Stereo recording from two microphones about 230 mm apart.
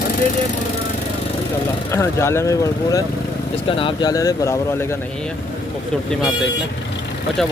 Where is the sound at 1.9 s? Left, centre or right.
Centre.